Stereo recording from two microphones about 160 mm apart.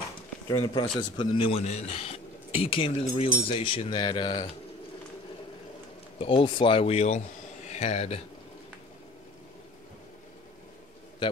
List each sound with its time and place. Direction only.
0.6 s a man's voice: 30° left (ahead or behind)
6.1 s speech: 35° left (ahead or behind)